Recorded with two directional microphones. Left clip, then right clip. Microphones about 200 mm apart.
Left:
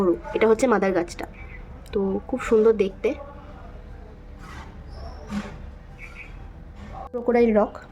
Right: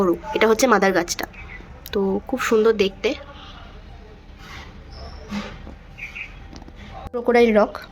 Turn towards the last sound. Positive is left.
turn(degrees=0)  # may be behind; listen again after turning